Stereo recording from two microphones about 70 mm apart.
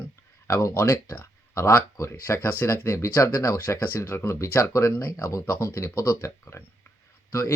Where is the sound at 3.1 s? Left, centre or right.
Left.